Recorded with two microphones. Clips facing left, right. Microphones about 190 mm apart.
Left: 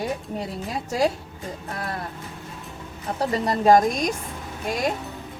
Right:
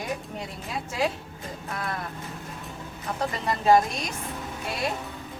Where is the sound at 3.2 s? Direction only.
35° left (ahead or behind).